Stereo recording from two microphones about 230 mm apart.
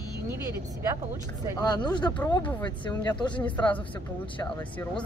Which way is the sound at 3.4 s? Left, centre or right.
Centre.